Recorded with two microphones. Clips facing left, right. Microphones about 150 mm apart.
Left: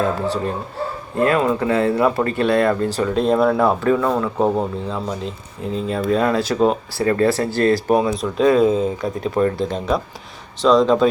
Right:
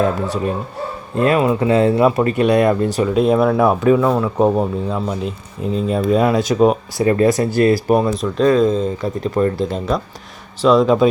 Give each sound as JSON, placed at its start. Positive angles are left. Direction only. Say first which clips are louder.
{"t": 1.1, "sound": "speech", "louder": "right 2 dB", "side_deg": -20}
{"t": 7.9, "sound": "speech", "louder": "right 2 dB", "side_deg": 0}